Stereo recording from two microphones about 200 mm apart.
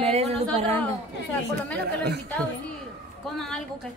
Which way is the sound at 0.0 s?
30° right (ahead or behind).